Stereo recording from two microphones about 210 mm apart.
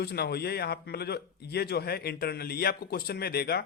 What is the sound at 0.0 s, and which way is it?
A man's voice, 50° left (ahead or behind).